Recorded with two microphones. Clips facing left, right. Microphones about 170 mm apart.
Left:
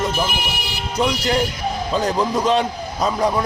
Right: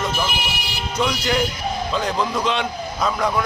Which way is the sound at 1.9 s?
40° left (ahead or behind).